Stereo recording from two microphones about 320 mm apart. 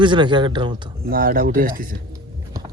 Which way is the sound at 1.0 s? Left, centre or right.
Right.